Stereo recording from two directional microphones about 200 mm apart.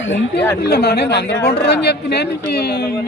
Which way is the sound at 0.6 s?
55° left (ahead or behind).